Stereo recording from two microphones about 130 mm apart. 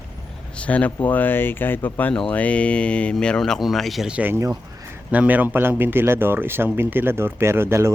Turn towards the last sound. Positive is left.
turn(degrees=-20)  # may be behind; listen again after turning